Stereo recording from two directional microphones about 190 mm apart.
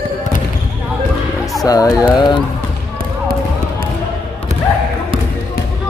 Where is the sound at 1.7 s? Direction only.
20° left (ahead or behind).